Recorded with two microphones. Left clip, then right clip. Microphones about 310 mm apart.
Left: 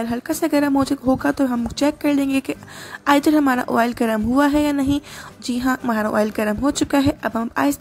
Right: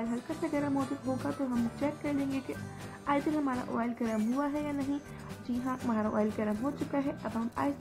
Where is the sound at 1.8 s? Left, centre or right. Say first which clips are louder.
Left 18 dB; left.